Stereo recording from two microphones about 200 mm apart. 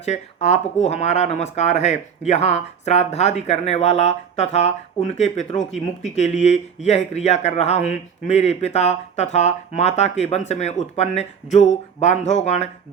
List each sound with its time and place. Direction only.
0.0 s speech: 35° left (ahead or behind)